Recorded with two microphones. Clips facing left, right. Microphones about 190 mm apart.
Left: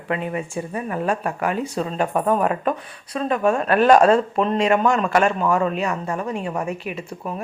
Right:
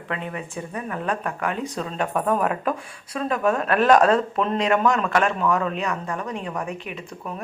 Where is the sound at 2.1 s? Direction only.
25° left (ahead or behind).